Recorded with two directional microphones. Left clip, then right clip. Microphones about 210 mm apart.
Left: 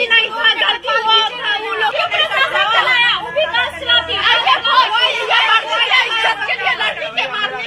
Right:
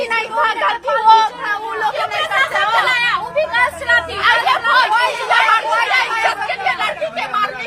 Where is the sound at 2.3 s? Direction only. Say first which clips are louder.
Right 1 dB; 25° right (ahead or behind).